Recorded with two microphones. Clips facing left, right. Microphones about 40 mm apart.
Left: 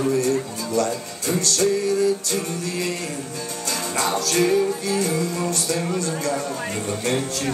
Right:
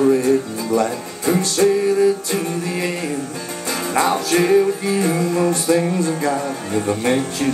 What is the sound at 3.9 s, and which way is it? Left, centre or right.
Music, right.